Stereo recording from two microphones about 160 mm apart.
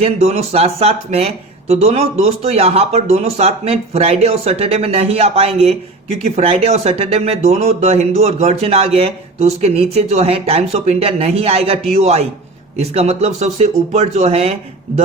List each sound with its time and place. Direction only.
0.0 s speech: 40° right (ahead or behind)